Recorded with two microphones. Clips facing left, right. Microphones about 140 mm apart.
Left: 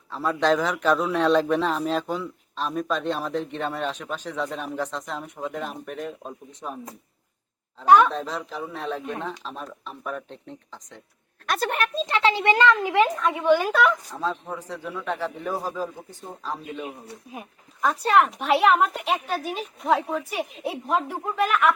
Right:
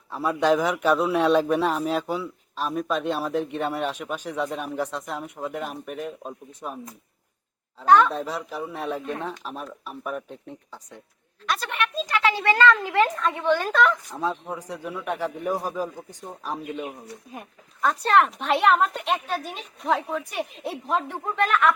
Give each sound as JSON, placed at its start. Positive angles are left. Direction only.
{"t": 0.1, "sound": "speech", "side_deg": -10}
{"t": 7.9, "sound": "speech", "side_deg": 10}
{"t": 8.1, "sound": "speech", "side_deg": -10}
{"t": 11.4, "sound": "a woman's voice", "side_deg": 50}
{"t": 12.0, "sound": "speech", "side_deg": 25}
{"t": 14.1, "sound": "speech", "side_deg": -15}
{"t": 17.3, "sound": "speech", "side_deg": 5}